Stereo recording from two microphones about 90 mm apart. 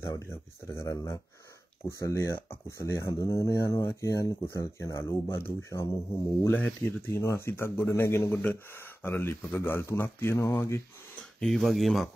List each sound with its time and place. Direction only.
0.0 s speech: 30° left (ahead or behind)
11.1 s speech: 10° left (ahead or behind)